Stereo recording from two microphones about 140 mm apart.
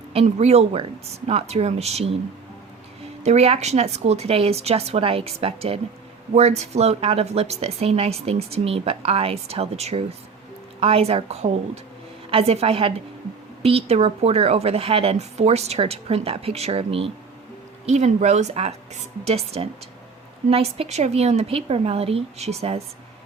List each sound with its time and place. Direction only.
0.1 s speech: 45° right (ahead or behind)
3.2 s speech: 50° right (ahead or behind)